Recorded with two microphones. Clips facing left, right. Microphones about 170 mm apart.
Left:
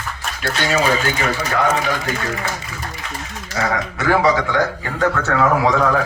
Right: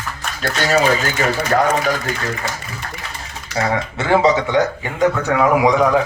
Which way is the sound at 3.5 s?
25° right (ahead or behind).